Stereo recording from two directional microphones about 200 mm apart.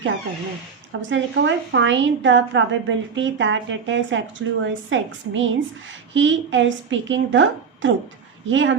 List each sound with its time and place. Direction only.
1.1 s a woman's voice: 65° right (ahead or behind)